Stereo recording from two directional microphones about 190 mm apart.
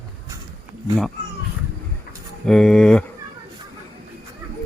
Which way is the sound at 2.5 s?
5° left (ahead or behind).